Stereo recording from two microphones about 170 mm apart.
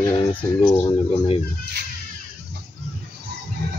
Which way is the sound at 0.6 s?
30° left (ahead or behind).